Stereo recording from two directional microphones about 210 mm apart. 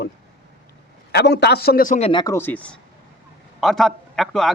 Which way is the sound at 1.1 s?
55° left (ahead or behind).